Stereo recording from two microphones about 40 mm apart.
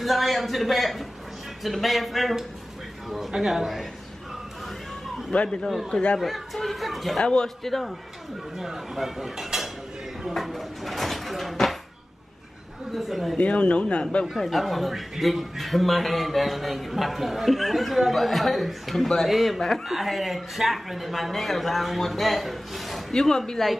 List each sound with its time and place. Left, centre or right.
0.0 s a man's voice: centre
5.3 s speech: left
6.1 s a man's voice: centre
7.2 s a man's voice: left
7.4 s a man's voice: centre
8.5 s a man's voice: centre
10.2 s drawer open or close: centre
12.9 s a man's voice: centre
13.4 s speech: left
14.3 s a man's voice: centre
23.1 s speech: centre